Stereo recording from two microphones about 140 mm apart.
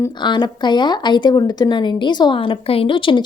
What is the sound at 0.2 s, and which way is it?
Speech, 35° left (ahead or behind).